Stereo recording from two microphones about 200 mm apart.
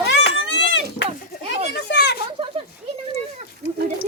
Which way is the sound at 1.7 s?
55° left (ahead or behind).